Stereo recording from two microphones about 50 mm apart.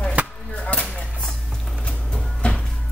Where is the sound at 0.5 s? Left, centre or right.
Left.